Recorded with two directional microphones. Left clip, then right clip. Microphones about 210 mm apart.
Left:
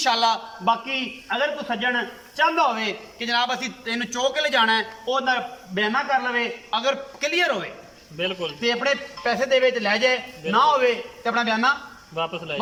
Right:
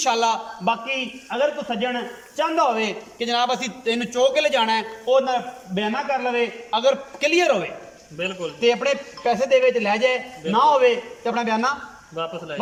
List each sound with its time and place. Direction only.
0.0 s a man's voice: 15° right (ahead or behind)
8.2 s a man's voice: centre (ahead or behind)
8.6 s a man's voice: 15° right (ahead or behind)
12.1 s a man's voice: 5° left (ahead or behind)